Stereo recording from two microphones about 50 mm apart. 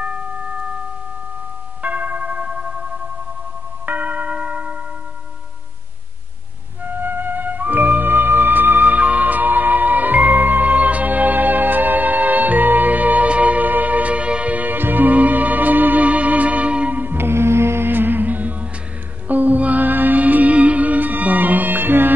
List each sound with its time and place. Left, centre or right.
1.8 s tubular bells: right
6.8 s flute: right
17.0 s music: right
17.3 s music: right